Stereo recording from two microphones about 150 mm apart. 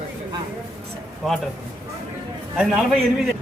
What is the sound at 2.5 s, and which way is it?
Speech, 5° right (ahead or behind).